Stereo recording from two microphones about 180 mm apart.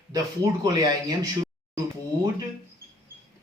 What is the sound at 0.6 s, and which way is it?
Speech, 20° right (ahead or behind).